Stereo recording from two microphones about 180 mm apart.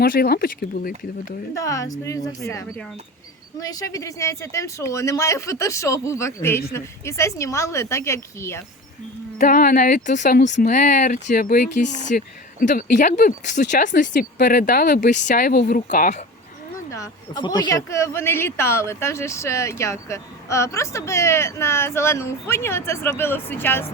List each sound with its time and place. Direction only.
0.0 s speech: 55° left (ahead or behind)
1.5 s speech: 20° left (ahead or behind)
3.6 s speech: 20° left (ahead or behind)
9.4 s speech: 50° left (ahead or behind)
14.1 s speech: 60° left (ahead or behind)
16.9 s speech: 20° left (ahead or behind)